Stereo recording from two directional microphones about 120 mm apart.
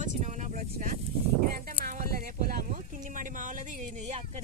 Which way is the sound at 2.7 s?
90° right.